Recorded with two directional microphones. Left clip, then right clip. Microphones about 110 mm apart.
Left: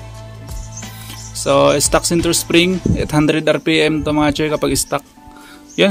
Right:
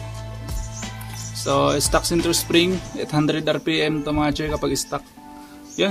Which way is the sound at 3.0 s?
85° left.